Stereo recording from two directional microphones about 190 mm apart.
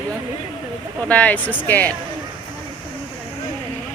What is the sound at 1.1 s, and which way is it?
Speech, 5° left (ahead or behind).